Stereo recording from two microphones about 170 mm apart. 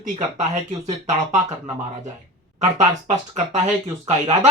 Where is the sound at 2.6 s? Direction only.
45° right (ahead or behind).